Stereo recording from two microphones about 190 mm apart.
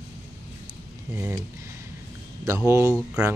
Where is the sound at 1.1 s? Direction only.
10° right (ahead or behind).